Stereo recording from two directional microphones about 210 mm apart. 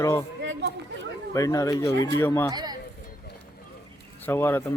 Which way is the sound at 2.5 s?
20° right (ahead or behind).